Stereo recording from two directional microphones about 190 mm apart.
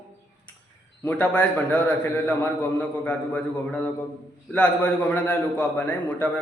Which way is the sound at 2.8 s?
10° left (ahead or behind).